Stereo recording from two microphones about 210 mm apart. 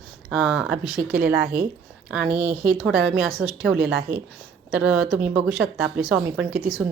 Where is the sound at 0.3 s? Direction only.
5° right (ahead or behind).